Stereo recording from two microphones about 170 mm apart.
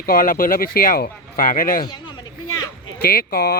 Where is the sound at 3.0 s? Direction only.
65° left (ahead or behind).